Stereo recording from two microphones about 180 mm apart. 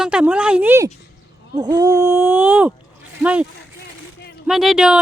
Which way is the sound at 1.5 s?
20° right (ahead or behind).